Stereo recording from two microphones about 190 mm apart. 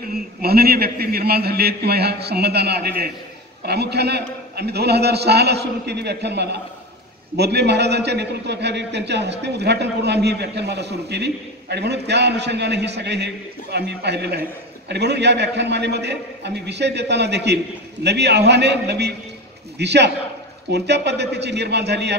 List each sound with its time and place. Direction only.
0.1 s a man's voice: 55° right (ahead or behind)